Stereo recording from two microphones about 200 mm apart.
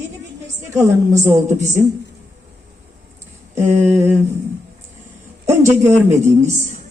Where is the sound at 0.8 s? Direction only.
15° right (ahead or behind).